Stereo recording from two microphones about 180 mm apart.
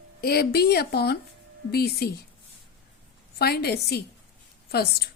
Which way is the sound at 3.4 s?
65° left (ahead or behind).